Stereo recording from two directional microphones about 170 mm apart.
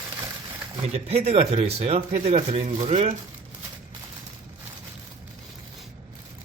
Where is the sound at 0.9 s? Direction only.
40° right (ahead or behind).